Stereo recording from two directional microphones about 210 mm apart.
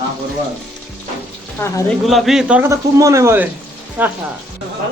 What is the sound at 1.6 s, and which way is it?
Frying, 15° left (ahead or behind).